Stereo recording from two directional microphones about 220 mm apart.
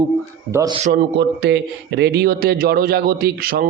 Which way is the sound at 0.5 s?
15° right (ahead or behind).